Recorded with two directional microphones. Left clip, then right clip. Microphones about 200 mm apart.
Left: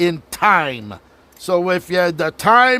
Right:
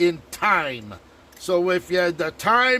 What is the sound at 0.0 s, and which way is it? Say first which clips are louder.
A man's voice: left 5 dB; 45° left (ahead or behind).